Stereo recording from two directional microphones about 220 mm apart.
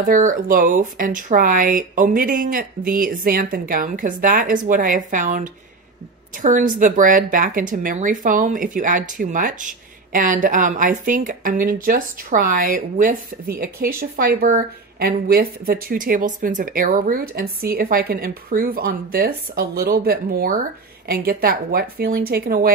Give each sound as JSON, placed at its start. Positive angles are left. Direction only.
{"t": 0.0, "sound": "speech", "side_deg": -40}